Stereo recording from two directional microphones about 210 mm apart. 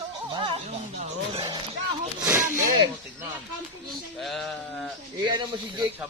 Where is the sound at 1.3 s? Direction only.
20° right (ahead or behind).